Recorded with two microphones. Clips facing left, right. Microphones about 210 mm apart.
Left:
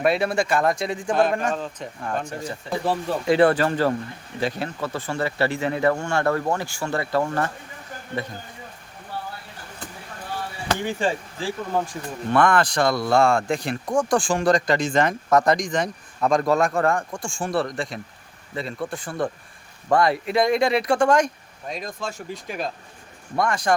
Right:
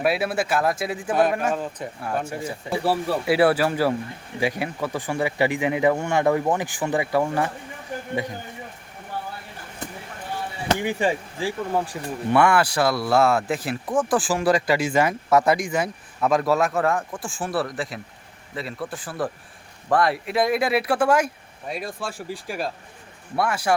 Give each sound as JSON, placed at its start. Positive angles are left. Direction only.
{"t": 0.0, "sound": "speech", "side_deg": -5}
{"t": 10.8, "sound": "speech", "side_deg": -15}